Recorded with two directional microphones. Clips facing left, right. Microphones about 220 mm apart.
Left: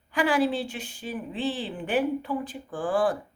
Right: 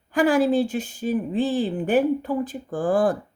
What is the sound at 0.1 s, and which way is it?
Speech, 45° right (ahead or behind).